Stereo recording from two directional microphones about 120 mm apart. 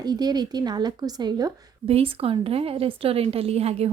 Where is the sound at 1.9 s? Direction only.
55° right (ahead or behind).